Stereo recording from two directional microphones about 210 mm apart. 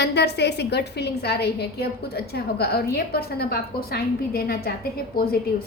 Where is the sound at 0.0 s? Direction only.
55° left (ahead or behind).